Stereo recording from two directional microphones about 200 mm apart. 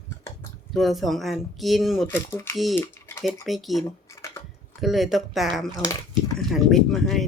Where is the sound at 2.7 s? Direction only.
10° left (ahead or behind).